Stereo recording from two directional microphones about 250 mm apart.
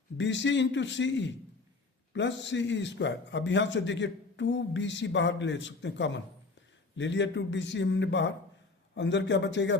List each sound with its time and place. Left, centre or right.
0.2 s a man's voice: left